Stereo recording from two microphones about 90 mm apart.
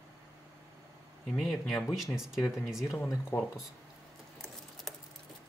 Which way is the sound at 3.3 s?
25° left (ahead or behind).